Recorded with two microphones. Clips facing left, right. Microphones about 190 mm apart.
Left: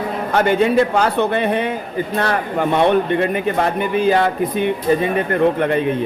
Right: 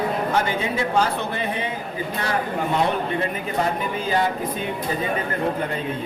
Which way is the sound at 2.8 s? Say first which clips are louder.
Left 9 dB; 65° left (ahead or behind).